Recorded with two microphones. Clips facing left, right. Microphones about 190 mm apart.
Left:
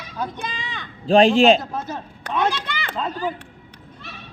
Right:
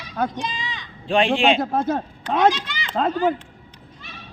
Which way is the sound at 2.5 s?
60° left (ahead or behind).